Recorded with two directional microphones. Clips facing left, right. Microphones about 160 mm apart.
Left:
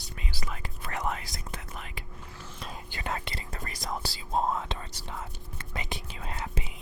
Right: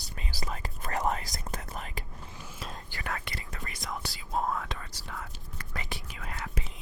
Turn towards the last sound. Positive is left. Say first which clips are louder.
# left 2 dB
turn(degrees=25)  # may be behind; listen again after turning